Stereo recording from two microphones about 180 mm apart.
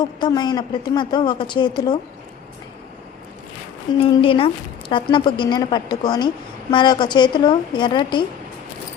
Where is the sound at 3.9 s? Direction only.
25° left (ahead or behind).